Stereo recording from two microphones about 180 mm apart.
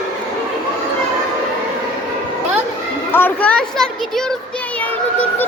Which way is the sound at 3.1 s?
10° left (ahead or behind).